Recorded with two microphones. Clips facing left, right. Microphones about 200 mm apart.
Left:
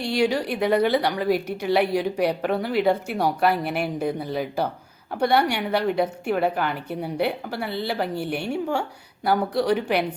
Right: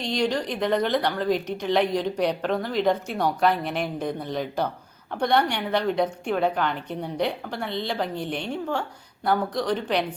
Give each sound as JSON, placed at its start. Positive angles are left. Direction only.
{"t": 0.0, "sound": "a woman's voice", "side_deg": 10}